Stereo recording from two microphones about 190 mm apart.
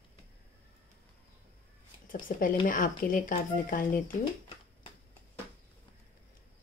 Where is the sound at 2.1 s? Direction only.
45° left (ahead or behind).